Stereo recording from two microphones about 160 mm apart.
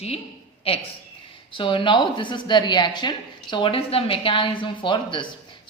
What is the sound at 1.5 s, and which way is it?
Speech, 35° left (ahead or behind).